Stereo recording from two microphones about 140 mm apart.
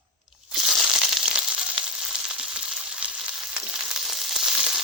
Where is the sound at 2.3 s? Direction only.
5° right (ahead or behind).